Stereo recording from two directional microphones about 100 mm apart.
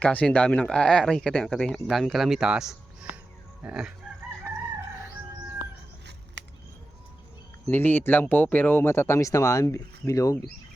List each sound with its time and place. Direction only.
0.0 s speech: 15° left (ahead or behind); by 3.9 s 10° right (ahead or behind)
7.7 s speech: 20° left (ahead or behind)